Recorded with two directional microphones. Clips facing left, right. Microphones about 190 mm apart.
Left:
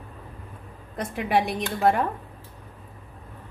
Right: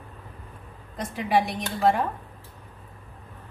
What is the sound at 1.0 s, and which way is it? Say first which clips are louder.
A woman's voice: even; 60° left (ahead or behind).